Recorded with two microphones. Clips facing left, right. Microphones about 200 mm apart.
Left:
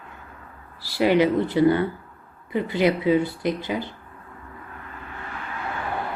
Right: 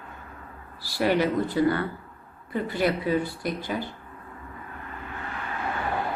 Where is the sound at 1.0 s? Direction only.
20° left (ahead or behind).